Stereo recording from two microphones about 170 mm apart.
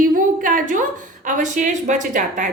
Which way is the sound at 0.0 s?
50° right (ahead or behind).